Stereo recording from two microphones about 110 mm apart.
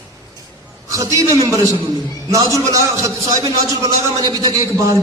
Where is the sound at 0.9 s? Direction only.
30° right (ahead or behind).